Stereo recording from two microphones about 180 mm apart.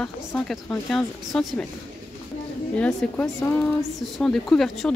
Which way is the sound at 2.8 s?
5° left (ahead or behind).